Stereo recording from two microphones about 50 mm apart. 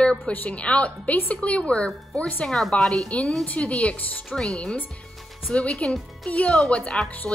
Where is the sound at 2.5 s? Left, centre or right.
Centre.